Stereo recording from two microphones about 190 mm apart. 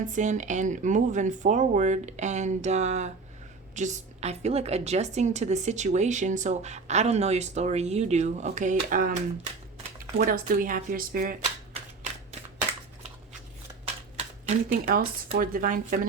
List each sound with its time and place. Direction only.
0.0 s a woman's voice: 40° right (ahead or behind)
13.8 s a sound: 35° right (ahead or behind)
15.4 s speech: 50° right (ahead or behind)